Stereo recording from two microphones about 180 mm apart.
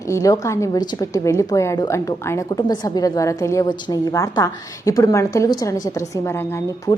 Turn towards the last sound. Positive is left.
turn(degrees=15)  # may be behind; listen again after turning